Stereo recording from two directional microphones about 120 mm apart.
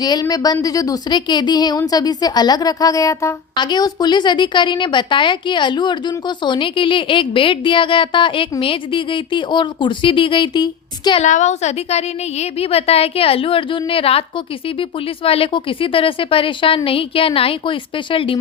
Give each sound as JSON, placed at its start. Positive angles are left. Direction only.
{"t": 0.0, "sound": "a woman's voice", "side_deg": 35}
{"t": 3.5, "sound": "a woman's voice", "side_deg": 40}
{"t": 11.2, "sound": "a woman's voice", "side_deg": 80}